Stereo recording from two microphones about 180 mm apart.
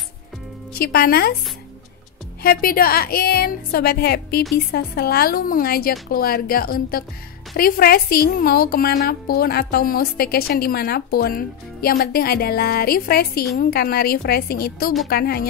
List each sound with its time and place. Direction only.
0.7 s a woman's voice: 55° left (ahead or behind)
2.4 s a woman's voice: 55° left (ahead or behind)